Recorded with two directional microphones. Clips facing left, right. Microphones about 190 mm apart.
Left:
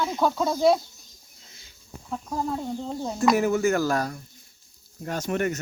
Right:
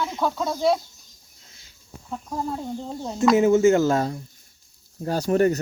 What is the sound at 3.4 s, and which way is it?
Speech, 20° right (ahead or behind).